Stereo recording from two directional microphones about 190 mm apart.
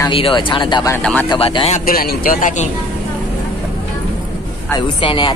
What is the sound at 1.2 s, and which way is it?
Speech, 25° left (ahead or behind).